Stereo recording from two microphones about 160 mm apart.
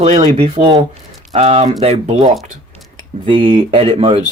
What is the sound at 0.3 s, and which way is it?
Speech, 40° right (ahead or behind).